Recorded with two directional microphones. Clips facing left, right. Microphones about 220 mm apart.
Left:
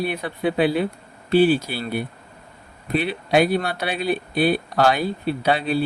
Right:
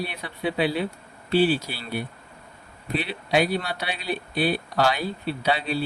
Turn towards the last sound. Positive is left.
turn(degrees=50)  # may be behind; listen again after turning